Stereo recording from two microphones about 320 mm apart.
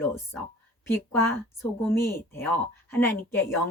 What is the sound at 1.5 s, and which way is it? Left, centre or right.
A woman's voice, centre.